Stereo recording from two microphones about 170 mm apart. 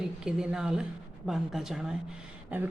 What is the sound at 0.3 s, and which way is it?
A woman's voice, 5° right (ahead or behind).